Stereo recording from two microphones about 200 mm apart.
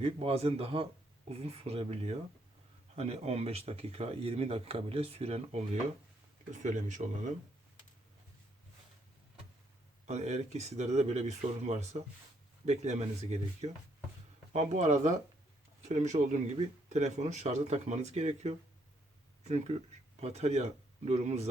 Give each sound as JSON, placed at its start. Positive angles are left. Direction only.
{"t": 0.0, "sound": "speech", "side_deg": -30}
{"t": 10.1, "sound": "speech", "side_deg": -35}